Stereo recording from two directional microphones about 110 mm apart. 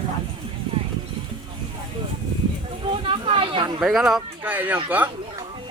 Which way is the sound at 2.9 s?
50° right (ahead or behind).